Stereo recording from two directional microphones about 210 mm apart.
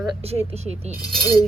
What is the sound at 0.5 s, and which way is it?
Speech, 30° right (ahead or behind).